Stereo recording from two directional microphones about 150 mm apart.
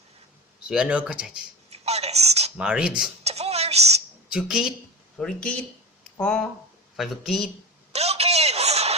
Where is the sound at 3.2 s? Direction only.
45° right (ahead or behind).